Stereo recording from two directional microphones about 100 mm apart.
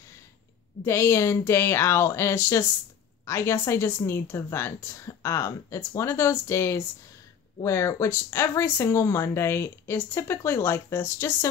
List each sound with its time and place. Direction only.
0.8 s speech: 25° left (ahead or behind)